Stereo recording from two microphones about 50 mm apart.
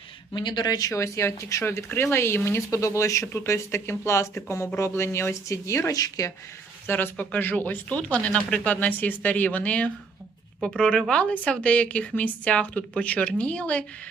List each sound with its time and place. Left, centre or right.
0.9 s speech: left
1.9 s speech: left
2.7 s speech: left
4.8 s speech: left
6.8 s speech: left
7.5 s speech: left
10.6 s speech: centre